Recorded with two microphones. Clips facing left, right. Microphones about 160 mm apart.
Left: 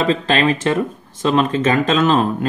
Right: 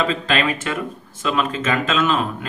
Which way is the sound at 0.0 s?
35° left (ahead or behind).